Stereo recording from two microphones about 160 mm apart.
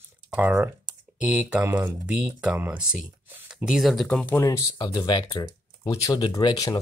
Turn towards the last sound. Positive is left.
turn(degrees=25)  # may be behind; listen again after turning